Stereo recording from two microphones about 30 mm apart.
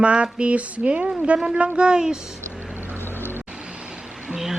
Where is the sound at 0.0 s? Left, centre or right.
Right.